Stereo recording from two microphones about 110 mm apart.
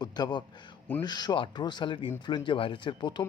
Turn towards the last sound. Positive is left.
turn(degrees=45)  # may be behind; listen again after turning